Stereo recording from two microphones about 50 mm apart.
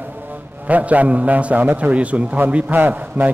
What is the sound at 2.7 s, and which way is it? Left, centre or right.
Speech, right.